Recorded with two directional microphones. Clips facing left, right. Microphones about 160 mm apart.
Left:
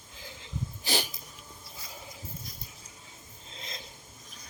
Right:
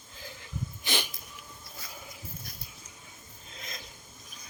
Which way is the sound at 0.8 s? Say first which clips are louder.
Left 2 dB; 35° left (ahead or behind).